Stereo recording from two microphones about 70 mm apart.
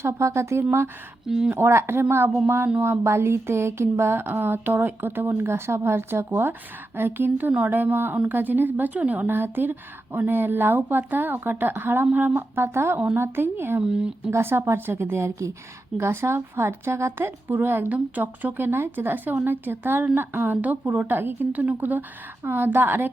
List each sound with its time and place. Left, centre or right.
0.0 s speech: right
1.3 s speech: centre
1.5 s a woman's voice: right
13.8 s speech: centre
14.3 s a woman's voice: right